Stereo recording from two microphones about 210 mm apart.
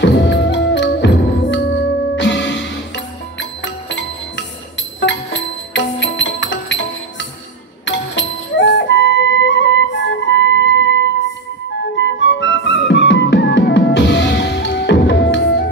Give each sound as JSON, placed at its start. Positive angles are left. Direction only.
{"t": 0.0, "sound": "music", "side_deg": 55}